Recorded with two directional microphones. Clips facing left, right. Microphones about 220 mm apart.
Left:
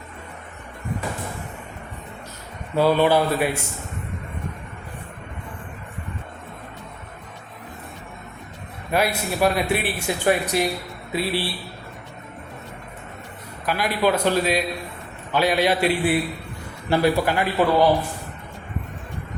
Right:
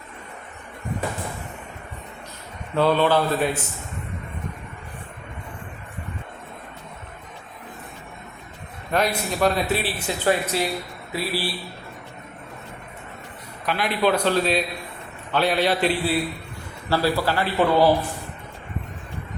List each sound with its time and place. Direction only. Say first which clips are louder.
2.7 s speech: left 1 dB; 10° left (ahead or behind)
8.9 s speech: left 1 dB; 10° left (ahead or behind); by 11.4 s 25° left (ahead or behind)
13.7 s speech: even; 5° left (ahead or behind)